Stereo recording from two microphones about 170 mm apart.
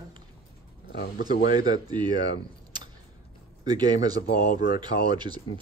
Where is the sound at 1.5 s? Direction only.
25° right (ahead or behind).